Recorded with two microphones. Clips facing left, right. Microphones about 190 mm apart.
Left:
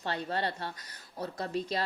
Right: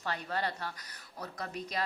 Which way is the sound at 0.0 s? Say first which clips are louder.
Left 2 dB; 30° left (ahead or behind).